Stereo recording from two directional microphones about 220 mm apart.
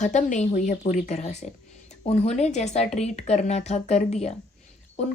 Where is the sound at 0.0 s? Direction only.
35° left (ahead or behind).